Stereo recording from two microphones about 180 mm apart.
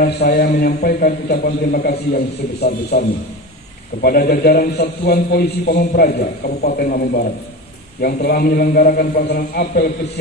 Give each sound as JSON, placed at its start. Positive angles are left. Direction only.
{"t": 0.0, "sound": "a man's voice", "side_deg": 60}